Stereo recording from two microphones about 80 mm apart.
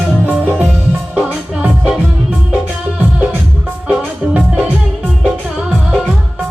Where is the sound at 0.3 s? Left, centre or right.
Right.